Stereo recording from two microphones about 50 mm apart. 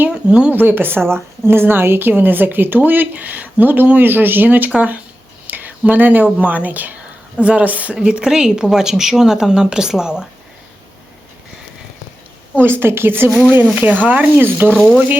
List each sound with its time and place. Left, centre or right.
0.1 s a sound: right
0.5 s a woman's voice: right
8.0 s a woman's voice: centre
12.5 s a woman's voice: right
13.7 s a woman's voice: right